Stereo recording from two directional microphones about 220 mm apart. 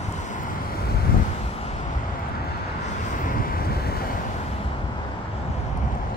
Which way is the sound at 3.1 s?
40° left (ahead or behind).